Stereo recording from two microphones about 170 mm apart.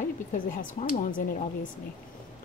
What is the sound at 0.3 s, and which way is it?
Speech, 50° left (ahead or behind).